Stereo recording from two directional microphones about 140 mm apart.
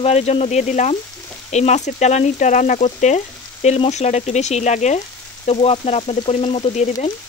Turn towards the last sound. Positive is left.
turn(degrees=50)  # may be behind; listen again after turning